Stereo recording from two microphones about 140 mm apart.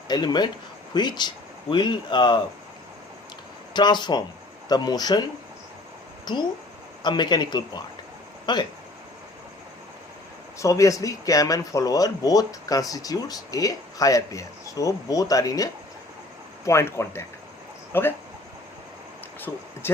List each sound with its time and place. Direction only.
0.1 s speech: 30° left (ahead or behind)
3.8 s speech: 30° left (ahead or behind)
6.2 s speech: 30° left (ahead or behind)
10.6 s speech: 25° left (ahead or behind)
19.8 s speech: 15° left (ahead or behind)